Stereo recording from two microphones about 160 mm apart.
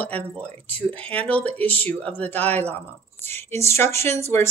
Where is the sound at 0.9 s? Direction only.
35° right (ahead or behind).